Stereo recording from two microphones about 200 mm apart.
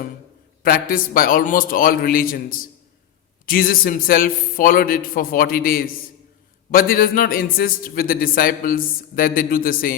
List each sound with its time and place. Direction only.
0.6 s a man's voice: 45° left (ahead or behind)